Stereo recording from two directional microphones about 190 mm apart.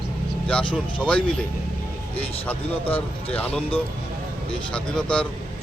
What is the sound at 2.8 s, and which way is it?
Speech, 30° left (ahead or behind).